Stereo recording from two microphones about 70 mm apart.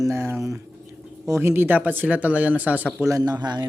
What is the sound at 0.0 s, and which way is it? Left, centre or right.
Speech, right.